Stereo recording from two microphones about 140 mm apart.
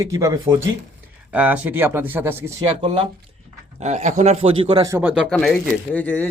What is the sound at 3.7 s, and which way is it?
Speech, 55° right (ahead or behind).